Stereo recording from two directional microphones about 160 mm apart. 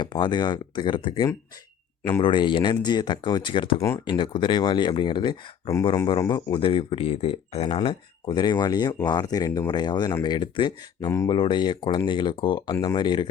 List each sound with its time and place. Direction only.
0.0 s speech: 30° left (ahead or behind)
3.8 s speech: 15° left (ahead or behind)
4.0 s speech: 30° left (ahead or behind)